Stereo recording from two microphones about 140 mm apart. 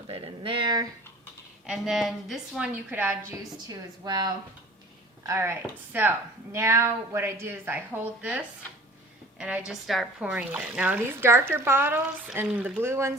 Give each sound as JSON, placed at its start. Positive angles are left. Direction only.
{"t": 0.1, "sound": "speech", "side_deg": -35}
{"t": 1.6, "sound": "a woman's voice", "side_deg": -5}
{"t": 3.7, "sound": "speech", "side_deg": -30}